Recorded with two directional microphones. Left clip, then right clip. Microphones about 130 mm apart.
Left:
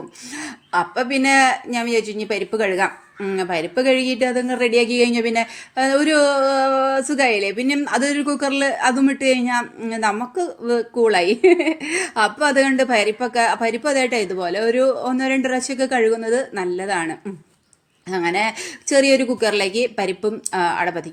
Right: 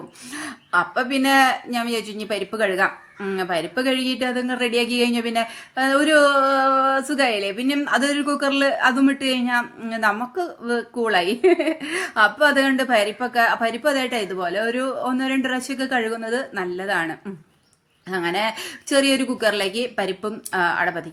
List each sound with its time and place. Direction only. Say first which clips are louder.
0.3 s speech: even; 20° left (ahead or behind)